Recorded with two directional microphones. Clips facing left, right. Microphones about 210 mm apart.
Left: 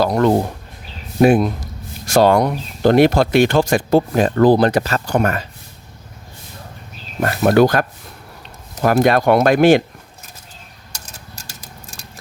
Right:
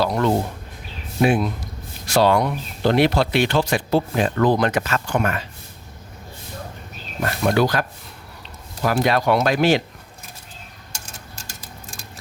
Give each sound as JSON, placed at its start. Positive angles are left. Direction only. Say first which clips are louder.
{"t": 0.0, "sound": "speech", "louder": "left 5 dB", "side_deg": 50}
{"t": 7.2, "sound": "speech", "louder": "left 6 dB", "side_deg": 50}
{"t": 10.9, "sound": "typewriter", "louder": "left 1 dB", "side_deg": 40}